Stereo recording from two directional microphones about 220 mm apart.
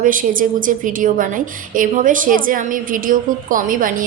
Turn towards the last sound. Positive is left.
turn(degrees=-40)  # may be behind; listen again after turning